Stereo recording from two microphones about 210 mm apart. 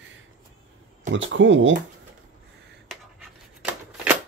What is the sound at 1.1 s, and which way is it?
Speech, 60° right (ahead or behind).